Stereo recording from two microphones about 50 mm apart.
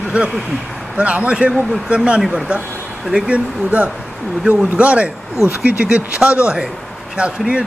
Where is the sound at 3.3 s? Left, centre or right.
Right.